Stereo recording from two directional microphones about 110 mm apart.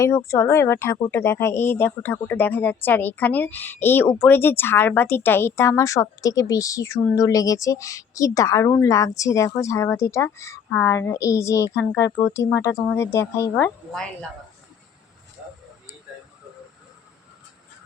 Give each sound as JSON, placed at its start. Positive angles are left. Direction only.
{"t": 0.0, "sound": "speech", "side_deg": 25}
{"t": 13.9, "sound": "speech", "side_deg": 5}